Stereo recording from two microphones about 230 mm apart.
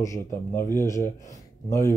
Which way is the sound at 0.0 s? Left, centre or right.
Centre.